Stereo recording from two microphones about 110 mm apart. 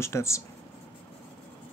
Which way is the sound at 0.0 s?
25° left (ahead or behind).